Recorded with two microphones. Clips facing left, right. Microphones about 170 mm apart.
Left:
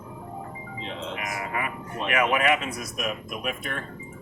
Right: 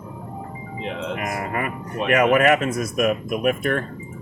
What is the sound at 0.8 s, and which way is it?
Speech, 60° right (ahead or behind).